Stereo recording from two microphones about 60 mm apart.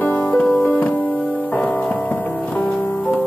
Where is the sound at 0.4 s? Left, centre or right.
Centre.